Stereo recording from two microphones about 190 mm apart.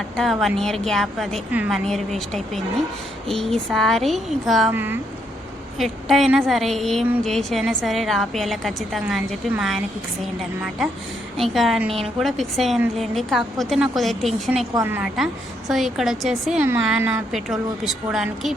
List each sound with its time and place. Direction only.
0.2 s a woman's voice: centre (ahead or behind)
5.8 s a woman's voice: centre (ahead or behind)
11.4 s a woman's voice: centre (ahead or behind)
14.8 s a woman's voice: 10° right (ahead or behind)